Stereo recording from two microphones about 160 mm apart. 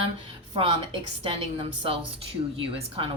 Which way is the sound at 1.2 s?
35° right (ahead or behind).